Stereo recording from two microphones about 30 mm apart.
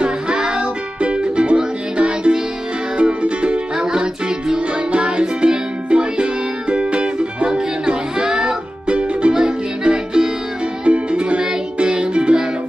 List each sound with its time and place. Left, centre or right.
0.6 s music: right
3.7 s music: right
4.9 s music: right
9.8 s music: right
10.9 s music: right